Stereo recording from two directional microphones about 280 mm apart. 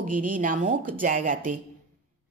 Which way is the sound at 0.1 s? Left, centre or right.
Right.